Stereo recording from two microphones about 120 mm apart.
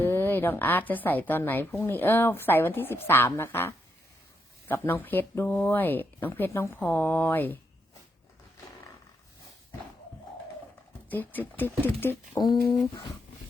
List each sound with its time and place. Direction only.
0.0 s a woman's voice: 15° left (ahead or behind)
11.1 s a woman's voice: 15° left (ahead or behind)